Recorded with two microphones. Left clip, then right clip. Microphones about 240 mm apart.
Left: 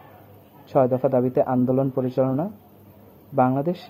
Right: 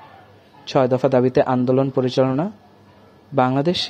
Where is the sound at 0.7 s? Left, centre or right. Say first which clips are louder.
Right 3 dB; right.